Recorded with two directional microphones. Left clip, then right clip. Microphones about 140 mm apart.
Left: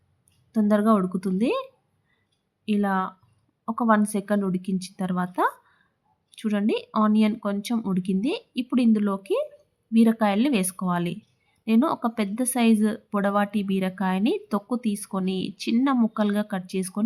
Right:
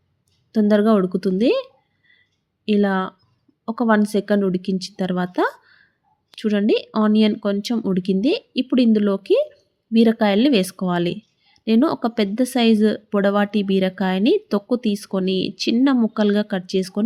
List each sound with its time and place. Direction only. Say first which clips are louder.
0.5 s a woman's voice: right 5 dB; 25° right (ahead or behind)